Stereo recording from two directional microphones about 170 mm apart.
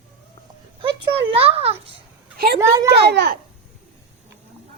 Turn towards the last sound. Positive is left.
turn(degrees=-75)  # may be behind; listen again after turning